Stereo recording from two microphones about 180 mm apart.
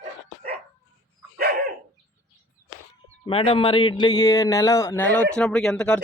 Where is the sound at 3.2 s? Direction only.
30° left (ahead or behind); by 5.9 s 5° left (ahead or behind).